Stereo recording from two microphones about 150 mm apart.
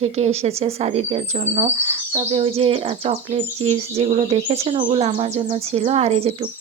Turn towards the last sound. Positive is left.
turn(degrees=-45)  # may be behind; listen again after turning